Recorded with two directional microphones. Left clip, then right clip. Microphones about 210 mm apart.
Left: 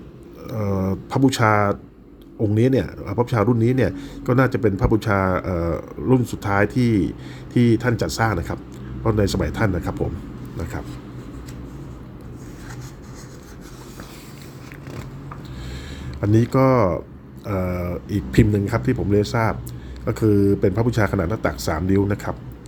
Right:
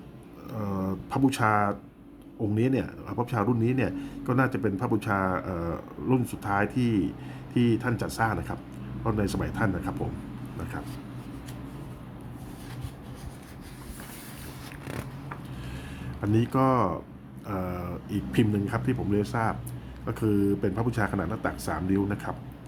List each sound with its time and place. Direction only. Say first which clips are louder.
0.4 s a sound: left 8 dB; 20° left (ahead or behind)
2.6 s speech: left 8 dB; 20° left (ahead or behind)
16.2 s speech: left 7 dB; 20° left (ahead or behind)